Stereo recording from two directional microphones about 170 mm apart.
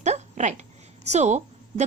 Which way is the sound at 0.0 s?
45° right (ahead or behind).